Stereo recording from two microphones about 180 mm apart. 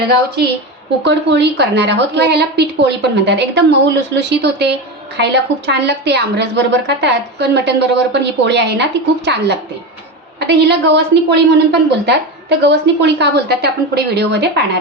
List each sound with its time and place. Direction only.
1.0 s a woman's voice: 70° right (ahead or behind)